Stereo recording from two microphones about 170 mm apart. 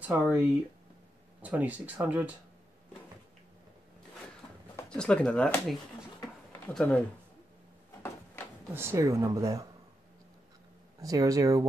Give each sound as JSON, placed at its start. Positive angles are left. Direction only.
{"t": 0.0, "sound": "speech", "side_deg": -10}
{"t": 1.4, "sound": "speech", "side_deg": -10}
{"t": 4.8, "sound": "speech", "side_deg": 5}
{"t": 6.2, "sound": "a sound", "side_deg": 0}
{"t": 8.7, "sound": "speech", "side_deg": -15}
{"t": 11.0, "sound": "speech", "side_deg": -20}